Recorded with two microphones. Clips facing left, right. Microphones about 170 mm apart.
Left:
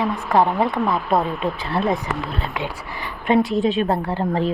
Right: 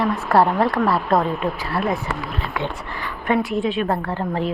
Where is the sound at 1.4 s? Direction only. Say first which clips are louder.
Left 1 dB; 25° left (ahead or behind).